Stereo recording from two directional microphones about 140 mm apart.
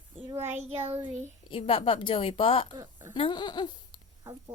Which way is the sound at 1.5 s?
40° left (ahead or behind).